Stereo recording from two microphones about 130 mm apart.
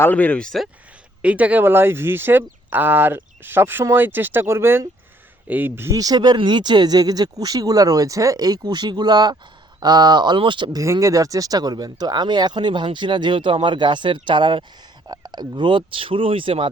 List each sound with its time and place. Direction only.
0.0 s speech: 10° left (ahead or behind)
1.2 s speech: 10° right (ahead or behind); by 16.6 s 45° right (ahead or behind)